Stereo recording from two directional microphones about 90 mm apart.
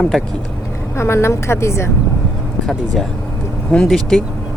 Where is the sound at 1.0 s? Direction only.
30° left (ahead or behind).